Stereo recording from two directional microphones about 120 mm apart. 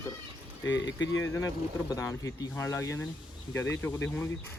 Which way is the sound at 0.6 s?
30° left (ahead or behind).